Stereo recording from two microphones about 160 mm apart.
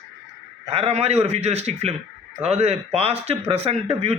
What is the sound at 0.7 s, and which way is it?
Speech, 40° right (ahead or behind).